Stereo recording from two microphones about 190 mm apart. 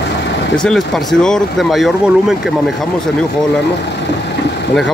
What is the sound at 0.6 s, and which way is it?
Speech, centre (ahead or behind).